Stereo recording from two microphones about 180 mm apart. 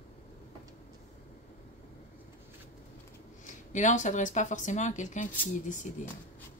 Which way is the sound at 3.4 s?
45° left (ahead or behind).